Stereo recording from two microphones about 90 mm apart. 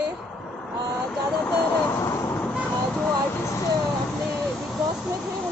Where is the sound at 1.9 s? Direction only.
35° left (ahead or behind).